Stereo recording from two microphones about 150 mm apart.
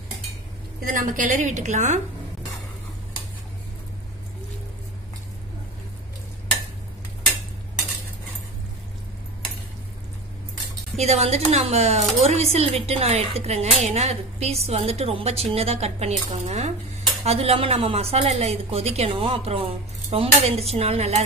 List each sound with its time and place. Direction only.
0.8 s a woman's voice: 60° right (ahead or behind)
11.0 s speech: 45° right (ahead or behind)